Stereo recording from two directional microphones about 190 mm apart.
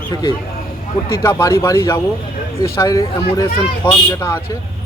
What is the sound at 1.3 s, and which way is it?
Speech, 15° left (ahead or behind).